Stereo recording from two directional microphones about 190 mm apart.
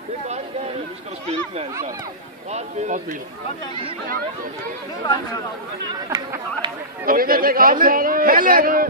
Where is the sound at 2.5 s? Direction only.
40° right (ahead or behind).